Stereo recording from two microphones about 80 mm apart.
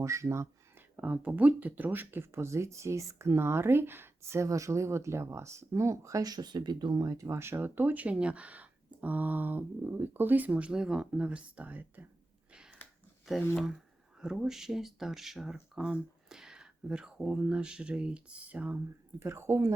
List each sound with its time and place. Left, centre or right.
0.0 s a sound: right
0.9 s speech: right
14.2 s speech: centre
19.2 s speech: right